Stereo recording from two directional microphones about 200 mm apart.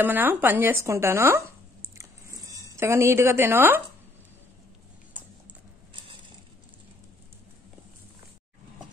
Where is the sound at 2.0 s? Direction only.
15° right (ahead or behind).